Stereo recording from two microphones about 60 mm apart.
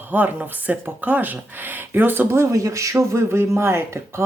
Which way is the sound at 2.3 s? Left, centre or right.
Right.